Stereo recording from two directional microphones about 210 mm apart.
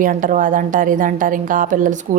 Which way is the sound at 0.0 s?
40° right (ahead or behind).